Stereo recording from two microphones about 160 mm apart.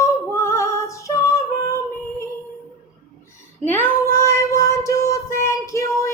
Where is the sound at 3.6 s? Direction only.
10° left (ahead or behind).